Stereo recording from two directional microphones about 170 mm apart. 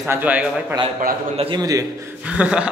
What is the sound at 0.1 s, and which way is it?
Speech, 10° right (ahead or behind).